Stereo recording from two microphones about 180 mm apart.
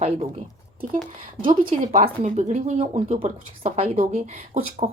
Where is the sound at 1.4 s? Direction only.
50° right (ahead or behind).